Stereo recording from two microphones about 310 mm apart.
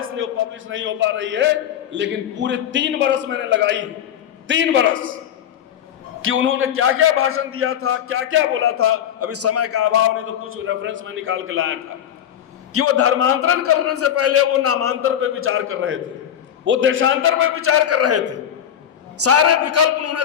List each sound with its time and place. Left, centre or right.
0.0 s a man's voice: right
6.2 s a man's voice: right
12.7 s a man's voice: right